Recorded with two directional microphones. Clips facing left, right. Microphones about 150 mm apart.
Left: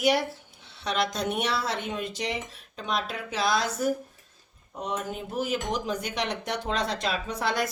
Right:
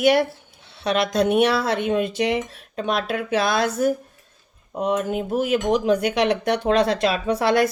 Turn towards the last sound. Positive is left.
turn(degrees=-65)  # may be behind; listen again after turning